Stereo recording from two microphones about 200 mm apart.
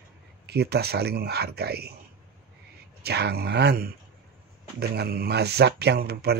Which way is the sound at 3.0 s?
55° right (ahead or behind).